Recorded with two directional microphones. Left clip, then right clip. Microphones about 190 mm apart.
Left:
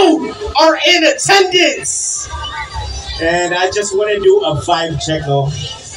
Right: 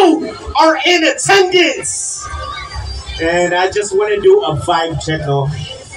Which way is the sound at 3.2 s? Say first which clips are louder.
Right 1 dB; 25° left (ahead or behind).